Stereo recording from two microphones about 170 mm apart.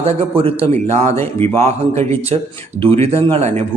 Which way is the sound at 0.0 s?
35° right (ahead or behind).